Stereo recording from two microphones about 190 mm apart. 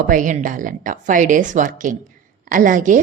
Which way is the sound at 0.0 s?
45° right (ahead or behind).